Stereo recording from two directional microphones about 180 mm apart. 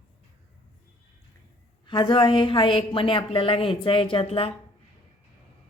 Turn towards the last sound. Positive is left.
turn(degrees=30)  # may be behind; listen again after turning